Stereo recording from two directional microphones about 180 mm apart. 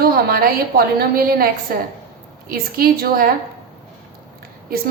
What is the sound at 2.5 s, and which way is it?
Speech, 55° right (ahead or behind).